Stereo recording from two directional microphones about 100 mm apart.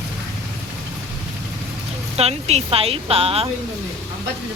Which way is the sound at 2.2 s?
90° right.